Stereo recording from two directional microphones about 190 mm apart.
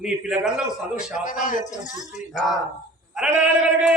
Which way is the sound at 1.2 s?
45° left (ahead or behind).